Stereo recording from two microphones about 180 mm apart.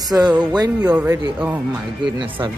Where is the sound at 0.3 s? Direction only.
5° right (ahead or behind).